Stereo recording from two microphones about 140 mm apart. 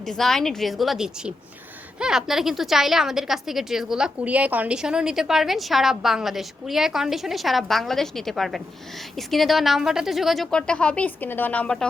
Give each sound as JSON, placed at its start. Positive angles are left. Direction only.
{"t": 0.1, "sound": "a woman's voice", "side_deg": 5}